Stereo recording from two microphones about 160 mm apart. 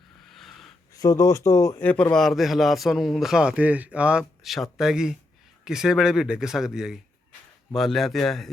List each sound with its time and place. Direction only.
0.2 s wheeze: centre (ahead or behind)
0.9 s speech: 20° left (ahead or behind); by 8.4 s centre (ahead or behind)